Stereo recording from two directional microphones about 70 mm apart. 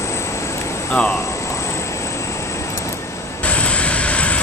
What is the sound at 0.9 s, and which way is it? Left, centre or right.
Speech, centre.